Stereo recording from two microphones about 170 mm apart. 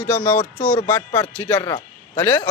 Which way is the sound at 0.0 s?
10° left (ahead or behind).